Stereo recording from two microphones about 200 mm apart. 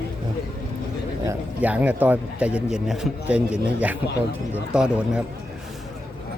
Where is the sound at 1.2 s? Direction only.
10° right (ahead or behind).